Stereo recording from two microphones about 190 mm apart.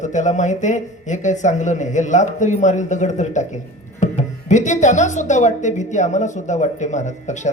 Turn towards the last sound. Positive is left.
turn(degrees=40)  # may be behind; listen again after turning